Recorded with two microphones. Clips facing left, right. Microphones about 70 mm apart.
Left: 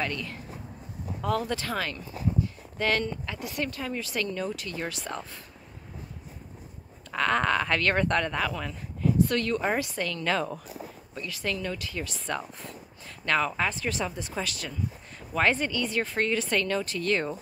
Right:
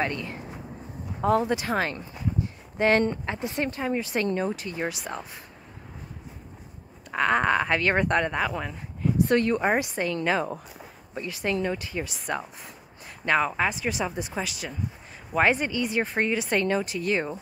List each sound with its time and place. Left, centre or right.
0.0 s a woman's voice: right
7.1 s a woman's voice: centre